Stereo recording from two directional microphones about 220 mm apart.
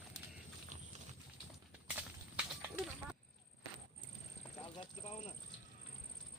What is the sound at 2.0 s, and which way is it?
Horse, 5° right (ahead or behind).